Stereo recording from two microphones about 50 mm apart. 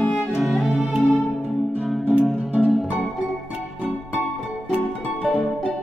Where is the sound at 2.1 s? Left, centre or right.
Right.